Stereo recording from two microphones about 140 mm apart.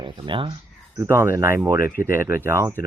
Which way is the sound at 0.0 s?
35° right (ahead or behind).